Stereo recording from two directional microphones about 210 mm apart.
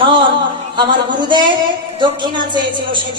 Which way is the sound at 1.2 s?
20° right (ahead or behind).